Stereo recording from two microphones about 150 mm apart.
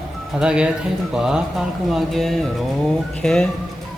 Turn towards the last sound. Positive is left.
turn(degrees=5)  # may be behind; listen again after turning